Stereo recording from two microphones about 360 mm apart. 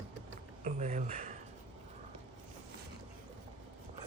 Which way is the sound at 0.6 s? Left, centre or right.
Centre.